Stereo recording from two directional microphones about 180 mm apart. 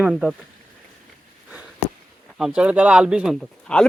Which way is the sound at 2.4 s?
5° right (ahead or behind).